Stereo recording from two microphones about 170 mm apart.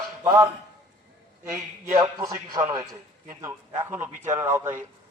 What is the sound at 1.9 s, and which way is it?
A man's voice, 20° right (ahead or behind).